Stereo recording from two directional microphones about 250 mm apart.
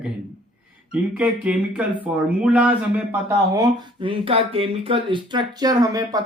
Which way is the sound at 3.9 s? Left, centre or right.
Right.